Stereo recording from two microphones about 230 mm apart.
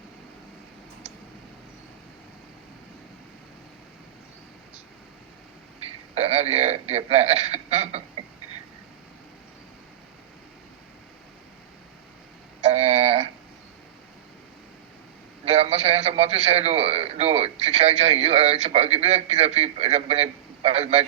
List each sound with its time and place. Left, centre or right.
6.1 s speech: right
12.7 s a sound: right
15.4 s a man's voice: right